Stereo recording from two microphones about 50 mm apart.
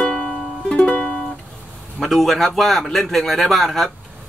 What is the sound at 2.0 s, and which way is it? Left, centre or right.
A man's voice, centre.